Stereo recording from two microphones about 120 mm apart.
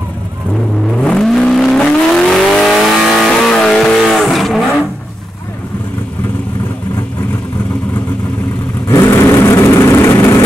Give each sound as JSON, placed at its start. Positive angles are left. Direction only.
{"t": 0.9, "sound": "vehicle", "side_deg": 5}
{"t": 9.0, "sound": "vehicle", "side_deg": 25}